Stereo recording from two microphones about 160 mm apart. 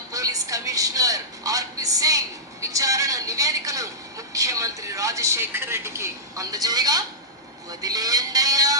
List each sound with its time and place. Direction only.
0.1 s a woman's voice: 20° right (ahead or behind)